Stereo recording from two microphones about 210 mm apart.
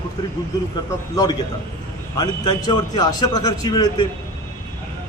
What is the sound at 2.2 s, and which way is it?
A man's voice, 20° left (ahead or behind).